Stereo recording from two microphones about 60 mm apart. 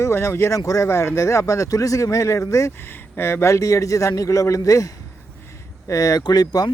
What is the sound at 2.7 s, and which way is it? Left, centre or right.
A man's voice, left.